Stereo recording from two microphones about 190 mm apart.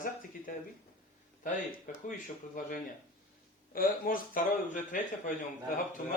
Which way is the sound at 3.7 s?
45° left (ahead or behind).